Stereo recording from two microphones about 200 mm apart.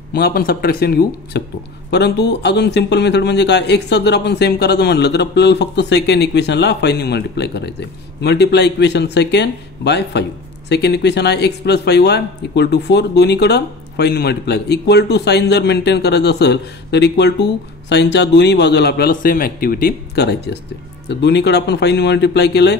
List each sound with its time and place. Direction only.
0.1 s speech: 50° left (ahead or behind)